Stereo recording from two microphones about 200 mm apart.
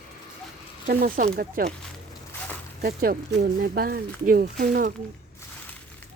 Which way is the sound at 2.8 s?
50° right (ahead or behind).